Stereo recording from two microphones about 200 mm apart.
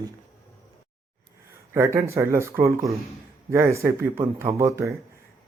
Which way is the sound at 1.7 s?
15° right (ahead or behind).